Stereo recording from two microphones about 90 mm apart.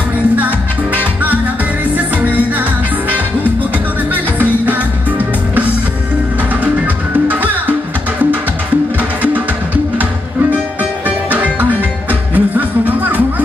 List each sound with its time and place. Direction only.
0.9 s salsa music: 15° right (ahead or behind)
4.1 s music: 20° right (ahead or behind)
7.2 s music: 20° right (ahead or behind)
11.1 s music: 20° right (ahead or behind)